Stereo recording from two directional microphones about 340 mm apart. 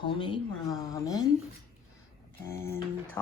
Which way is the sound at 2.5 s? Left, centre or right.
Centre.